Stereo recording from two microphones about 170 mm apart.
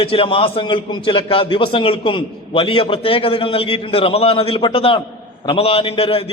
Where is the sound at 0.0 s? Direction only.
35° left (ahead or behind).